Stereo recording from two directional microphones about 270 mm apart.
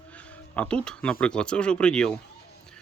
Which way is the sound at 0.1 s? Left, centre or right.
Centre.